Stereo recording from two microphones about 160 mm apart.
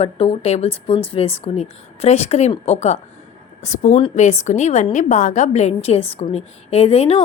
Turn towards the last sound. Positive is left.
turn(degrees=40)  # may be behind; listen again after turning